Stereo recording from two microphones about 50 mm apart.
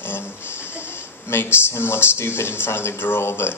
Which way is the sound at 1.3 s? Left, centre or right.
Left.